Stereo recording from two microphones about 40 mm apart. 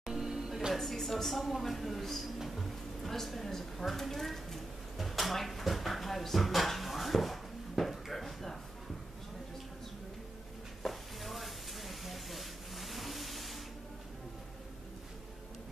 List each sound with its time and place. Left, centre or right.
0.0 s music: centre
0.7 s a woman's voice: centre
10.8 s a sound: centre